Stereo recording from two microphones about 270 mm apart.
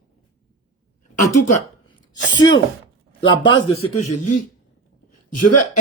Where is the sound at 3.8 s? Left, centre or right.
Left.